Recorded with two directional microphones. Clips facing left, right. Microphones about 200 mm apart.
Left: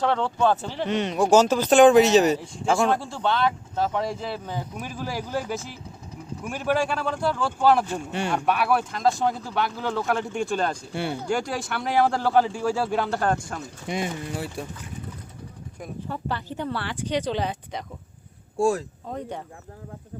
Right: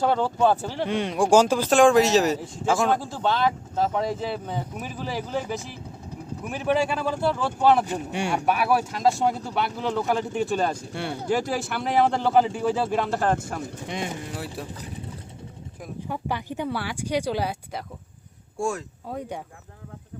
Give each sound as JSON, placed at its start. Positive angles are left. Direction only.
{"t": 0.0, "sound": "speech", "side_deg": -5}
{"t": 1.7, "sound": "speech", "side_deg": 0}
{"t": 16.0, "sound": "speech", "side_deg": -15}
{"t": 18.5, "sound": "speech", "side_deg": 35}
{"t": 19.0, "sound": "speech", "side_deg": -5}